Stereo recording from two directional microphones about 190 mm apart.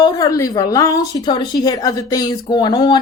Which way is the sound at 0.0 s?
20° left (ahead or behind).